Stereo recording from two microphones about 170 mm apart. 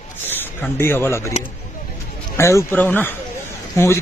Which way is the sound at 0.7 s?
15° left (ahead or behind).